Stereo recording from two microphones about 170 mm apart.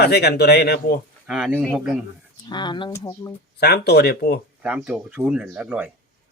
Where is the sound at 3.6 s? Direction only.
70° left (ahead or behind).